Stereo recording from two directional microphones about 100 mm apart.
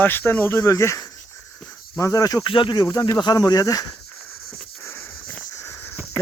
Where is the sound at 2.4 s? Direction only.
55° left (ahead or behind).